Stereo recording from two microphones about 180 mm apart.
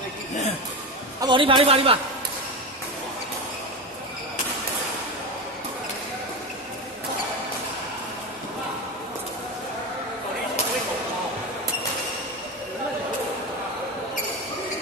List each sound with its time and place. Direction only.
1.2 s a man's voice: 25° right (ahead or behind)